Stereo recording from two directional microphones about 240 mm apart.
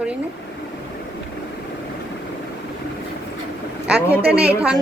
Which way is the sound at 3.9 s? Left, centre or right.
Centre.